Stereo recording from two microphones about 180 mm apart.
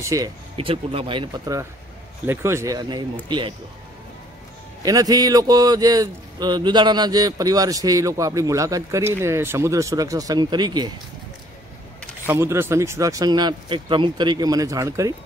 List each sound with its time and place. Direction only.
0.0 s speech: 15° right (ahead or behind)
0.6 s speech: 30° right (ahead or behind)
4.8 s speech: 20° right (ahead or behind)
12.3 s speech: 15° right (ahead or behind)